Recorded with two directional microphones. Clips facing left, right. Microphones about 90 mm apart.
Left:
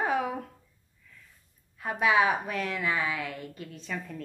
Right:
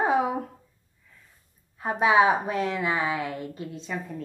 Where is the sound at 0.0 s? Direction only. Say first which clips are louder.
Right 5 dB; 20° right (ahead or behind).